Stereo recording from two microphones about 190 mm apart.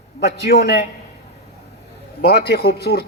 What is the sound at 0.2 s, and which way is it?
Speech, 60° left (ahead or behind).